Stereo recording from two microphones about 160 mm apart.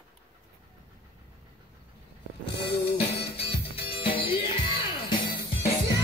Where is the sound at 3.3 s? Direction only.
35° left (ahead or behind).